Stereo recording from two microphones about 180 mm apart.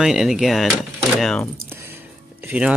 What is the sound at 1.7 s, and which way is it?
Music, 15° right (ahead or behind).